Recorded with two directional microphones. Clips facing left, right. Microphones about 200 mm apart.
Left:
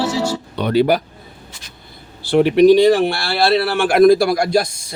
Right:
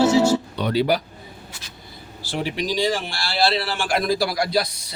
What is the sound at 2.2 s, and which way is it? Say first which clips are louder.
Speech: left 16 dB; 60° left (ahead or behind).